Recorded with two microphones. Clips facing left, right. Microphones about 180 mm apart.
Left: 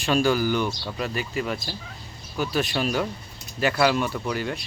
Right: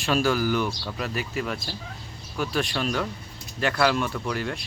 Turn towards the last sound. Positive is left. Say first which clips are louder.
# left 1 dB
turn(degrees=0)  # may be behind; listen again after turning